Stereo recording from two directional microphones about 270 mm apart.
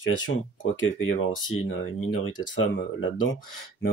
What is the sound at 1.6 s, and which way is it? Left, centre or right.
Speech, left.